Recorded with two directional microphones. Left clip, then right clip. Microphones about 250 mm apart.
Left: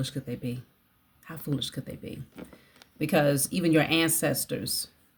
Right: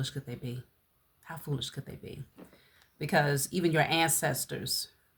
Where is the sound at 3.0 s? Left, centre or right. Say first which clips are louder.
Left 4 dB; centre.